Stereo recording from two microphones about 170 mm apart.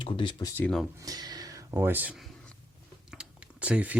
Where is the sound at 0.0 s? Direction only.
30° left (ahead or behind).